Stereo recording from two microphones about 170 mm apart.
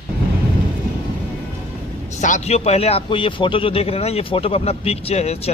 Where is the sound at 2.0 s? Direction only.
45° left (ahead or behind).